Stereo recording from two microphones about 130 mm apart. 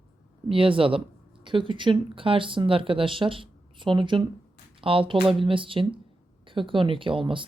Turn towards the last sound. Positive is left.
turn(degrees=-40)  # may be behind; listen again after turning